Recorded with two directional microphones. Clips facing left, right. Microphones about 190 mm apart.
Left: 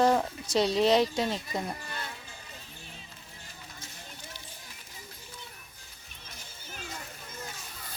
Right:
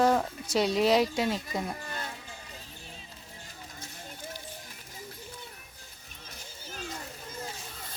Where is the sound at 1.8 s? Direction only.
40° right (ahead or behind).